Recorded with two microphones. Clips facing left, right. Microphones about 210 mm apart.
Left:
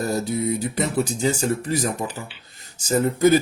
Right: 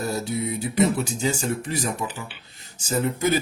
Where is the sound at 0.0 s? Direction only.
40° left (ahead or behind).